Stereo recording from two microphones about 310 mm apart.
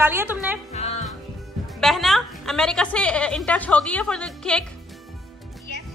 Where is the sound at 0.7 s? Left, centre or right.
Left.